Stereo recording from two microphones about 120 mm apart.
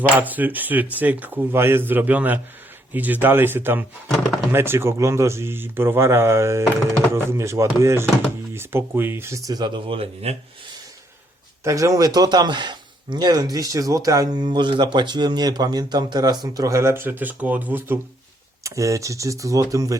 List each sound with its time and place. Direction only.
0.2 s speech: 15° right (ahead or behind); by 10.3 s 55° right (ahead or behind)
11.6 s speech: 25° right (ahead or behind)